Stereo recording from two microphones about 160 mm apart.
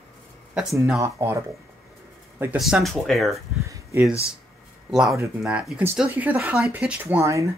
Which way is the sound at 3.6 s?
20° right (ahead or behind).